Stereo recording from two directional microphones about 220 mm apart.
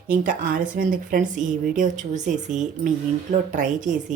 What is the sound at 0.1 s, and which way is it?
Speech, 35° right (ahead or behind).